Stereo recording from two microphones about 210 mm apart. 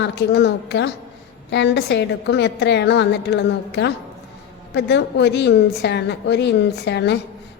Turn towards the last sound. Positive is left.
turn(degrees=55)  # may be behind; listen again after turning